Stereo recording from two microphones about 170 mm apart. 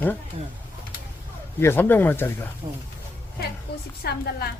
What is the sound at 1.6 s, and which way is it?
Speech, 10° left (ahead or behind).